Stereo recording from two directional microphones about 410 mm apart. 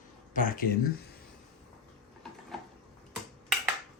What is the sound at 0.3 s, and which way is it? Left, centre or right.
Speech, centre.